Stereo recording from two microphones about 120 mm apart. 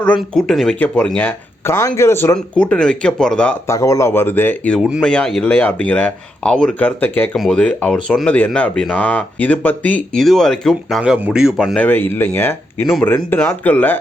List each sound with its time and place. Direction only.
0.2 s speech: centre (ahead or behind)
1.6 s speech: 25° left (ahead or behind)
2.6 s speech: 10° left (ahead or behind)
3.7 s speech: 25° left (ahead or behind)
4.8 s speech: 5° right (ahead or behind)
5.0 s speech: 5° left (ahead or behind)
7.3 s speech: centre (ahead or behind)
7.6 s speech: 10° left (ahead or behind)
11.8 s speech: 15° left (ahead or behind)